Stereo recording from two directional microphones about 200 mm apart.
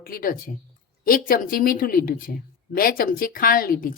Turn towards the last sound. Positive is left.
turn(degrees=45)  # may be behind; listen again after turning